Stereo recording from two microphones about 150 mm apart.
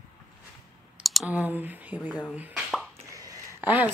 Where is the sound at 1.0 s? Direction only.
5° right (ahead or behind).